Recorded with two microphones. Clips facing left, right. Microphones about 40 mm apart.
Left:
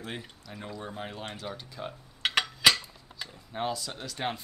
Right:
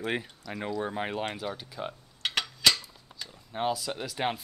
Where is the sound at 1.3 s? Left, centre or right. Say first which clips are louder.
Right 3 dB; centre.